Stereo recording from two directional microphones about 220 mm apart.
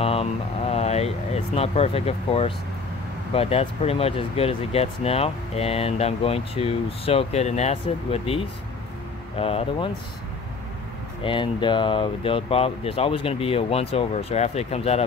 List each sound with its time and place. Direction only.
0.0 s speech: 25° left (ahead or behind)
9.4 s speech: 25° left (ahead or behind)
11.2 s speech: 20° left (ahead or behind)